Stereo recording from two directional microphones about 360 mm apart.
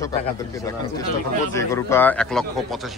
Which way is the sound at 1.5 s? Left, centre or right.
Centre.